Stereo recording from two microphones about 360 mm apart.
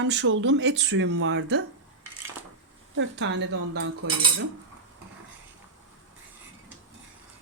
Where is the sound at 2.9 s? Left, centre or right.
Right.